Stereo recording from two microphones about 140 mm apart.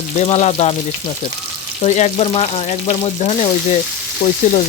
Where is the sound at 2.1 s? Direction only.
45° left (ahead or behind).